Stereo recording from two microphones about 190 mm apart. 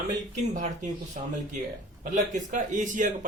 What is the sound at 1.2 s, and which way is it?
Speech, 40° right (ahead or behind).